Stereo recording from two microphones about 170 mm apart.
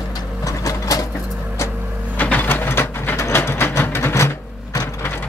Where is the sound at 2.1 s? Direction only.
10° left (ahead or behind).